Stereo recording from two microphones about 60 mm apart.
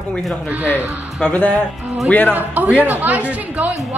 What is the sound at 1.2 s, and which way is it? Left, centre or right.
Speech, left.